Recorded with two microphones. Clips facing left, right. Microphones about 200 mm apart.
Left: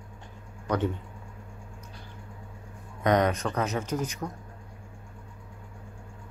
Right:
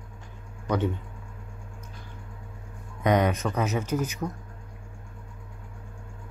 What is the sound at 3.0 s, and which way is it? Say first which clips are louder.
Speech: right 1 dB; 5° right (ahead or behind).